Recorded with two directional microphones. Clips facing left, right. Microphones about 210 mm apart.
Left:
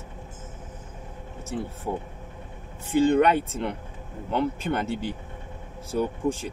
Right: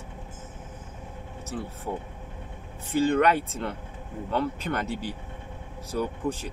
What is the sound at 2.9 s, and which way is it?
Speech, 25° left (ahead or behind).